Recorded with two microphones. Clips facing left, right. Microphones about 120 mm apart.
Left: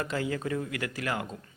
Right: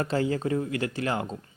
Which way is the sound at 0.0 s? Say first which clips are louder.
Right 5 dB; 30° right (ahead or behind).